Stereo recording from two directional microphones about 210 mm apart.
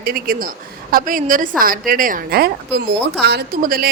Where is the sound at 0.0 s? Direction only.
45° right (ahead or behind).